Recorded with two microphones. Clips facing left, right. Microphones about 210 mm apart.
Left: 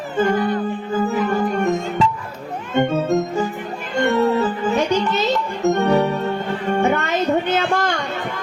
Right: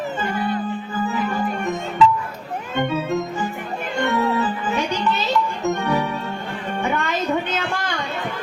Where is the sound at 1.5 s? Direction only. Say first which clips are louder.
Left 5 dB; 45° left (ahead or behind).